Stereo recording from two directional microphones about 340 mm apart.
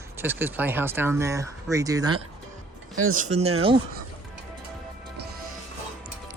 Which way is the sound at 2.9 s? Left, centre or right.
Right.